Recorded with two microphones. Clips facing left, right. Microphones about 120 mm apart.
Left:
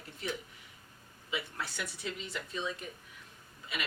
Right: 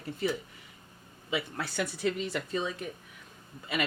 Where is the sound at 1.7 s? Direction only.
80° right.